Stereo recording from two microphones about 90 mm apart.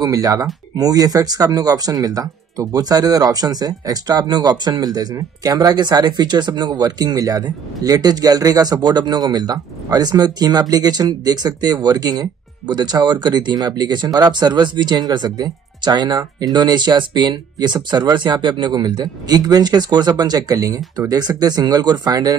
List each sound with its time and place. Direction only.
0.0 s speech: 40° right (ahead or behind)